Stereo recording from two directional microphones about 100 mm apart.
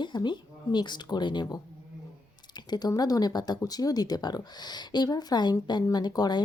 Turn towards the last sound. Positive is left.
turn(degrees=45)  # may be behind; listen again after turning